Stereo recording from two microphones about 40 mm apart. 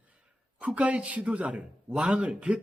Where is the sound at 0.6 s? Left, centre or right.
Right.